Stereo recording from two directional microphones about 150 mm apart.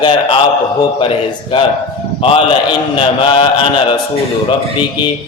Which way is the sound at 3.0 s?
35° left (ahead or behind).